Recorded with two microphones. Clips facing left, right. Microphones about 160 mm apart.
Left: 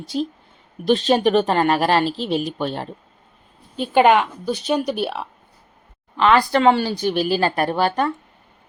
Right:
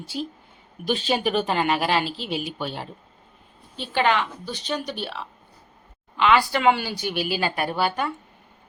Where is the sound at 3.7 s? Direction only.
50° left (ahead or behind).